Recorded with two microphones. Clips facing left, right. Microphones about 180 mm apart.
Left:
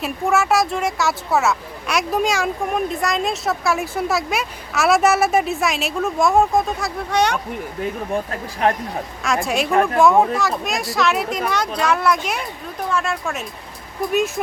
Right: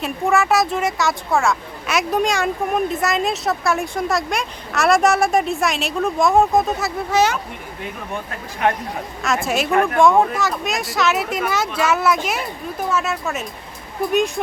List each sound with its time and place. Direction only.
0.0 s speech: centre (ahead or behind)
8.6 s speech: 35° left (ahead or behind)
9.2 s speech: centre (ahead or behind)